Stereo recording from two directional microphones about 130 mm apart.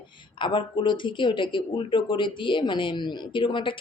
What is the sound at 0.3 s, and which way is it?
Speech, 40° left (ahead or behind).